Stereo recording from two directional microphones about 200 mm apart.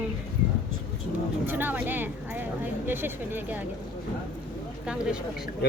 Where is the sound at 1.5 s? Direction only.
10° right (ahead or behind).